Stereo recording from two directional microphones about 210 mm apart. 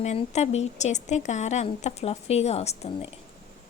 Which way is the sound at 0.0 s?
30° left (ahead or behind).